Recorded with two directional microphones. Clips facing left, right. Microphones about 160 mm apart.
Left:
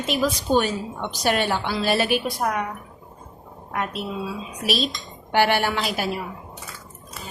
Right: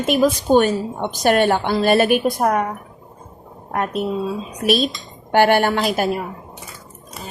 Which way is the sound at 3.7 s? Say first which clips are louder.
Right 7 dB; 45° right (ahead or behind).